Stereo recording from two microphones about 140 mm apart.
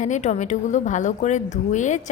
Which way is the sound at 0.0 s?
60° left (ahead or behind).